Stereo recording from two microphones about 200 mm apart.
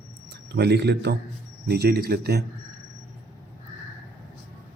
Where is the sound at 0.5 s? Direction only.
55° right (ahead or behind).